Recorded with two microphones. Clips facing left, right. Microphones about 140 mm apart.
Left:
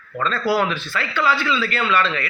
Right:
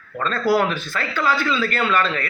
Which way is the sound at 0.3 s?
45° right (ahead or behind).